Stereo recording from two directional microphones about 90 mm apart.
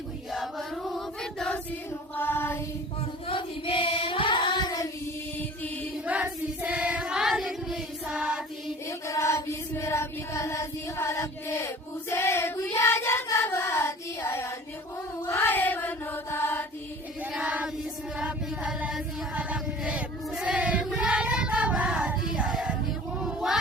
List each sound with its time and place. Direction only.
0.3 s a sound: 5° left (ahead or behind)
2.1 s a sound: 25° left (ahead or behind)
3.2 s child singing: 90° left; by 4.9 s 45° left (ahead or behind)
6.1 s child singing: 15° right (ahead or behind)
8.9 s chant: 35° left (ahead or behind)
13.2 s child singing: 30° left (ahead or behind)
15.3 s mantra: 25° left (ahead or behind)
17.3 s choir: 10° right (ahead or behind)
18.2 s chant: 15° right (ahead or behind)
19.3 s choir: 15° right (ahead or behind)
23.2 s a sound: 5° right (ahead or behind)